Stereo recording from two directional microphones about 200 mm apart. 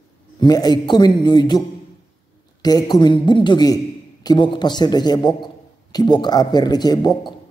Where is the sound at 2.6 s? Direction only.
20° left (ahead or behind).